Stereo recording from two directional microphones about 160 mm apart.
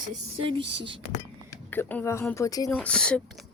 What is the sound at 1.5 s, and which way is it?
Speech, 15° left (ahead or behind).